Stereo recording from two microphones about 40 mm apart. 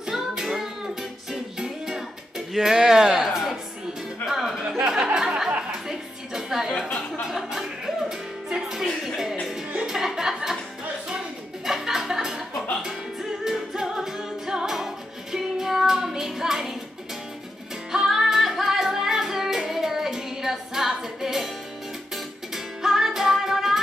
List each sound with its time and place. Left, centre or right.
0.3 s music: centre
4.3 s music: centre
4.8 s music: centre
11.6 s music: centre
15.3 s child singing: centre
18.0 s music: centre